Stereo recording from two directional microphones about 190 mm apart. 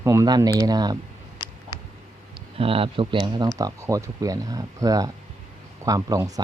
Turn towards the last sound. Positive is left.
turn(degrees=-20)  # may be behind; listen again after turning